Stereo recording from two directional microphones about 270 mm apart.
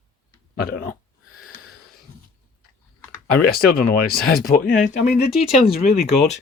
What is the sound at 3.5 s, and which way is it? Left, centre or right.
Speech, left.